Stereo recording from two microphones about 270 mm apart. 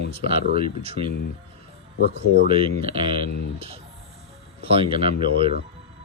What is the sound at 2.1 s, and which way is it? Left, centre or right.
Speech, right.